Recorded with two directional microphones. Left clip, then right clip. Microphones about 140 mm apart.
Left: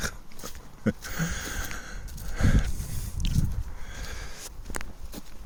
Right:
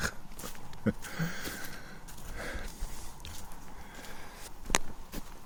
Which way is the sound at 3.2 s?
50° left (ahead or behind).